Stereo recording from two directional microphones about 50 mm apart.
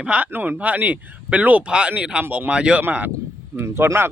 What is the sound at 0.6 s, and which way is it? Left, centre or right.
Speech, right.